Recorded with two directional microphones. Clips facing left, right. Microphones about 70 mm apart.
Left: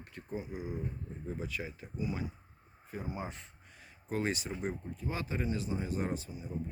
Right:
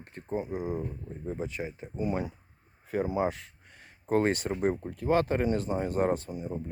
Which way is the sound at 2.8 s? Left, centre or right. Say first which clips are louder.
Right 12 dB; right.